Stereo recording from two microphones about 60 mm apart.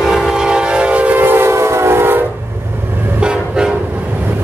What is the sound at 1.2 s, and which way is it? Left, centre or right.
Train, right.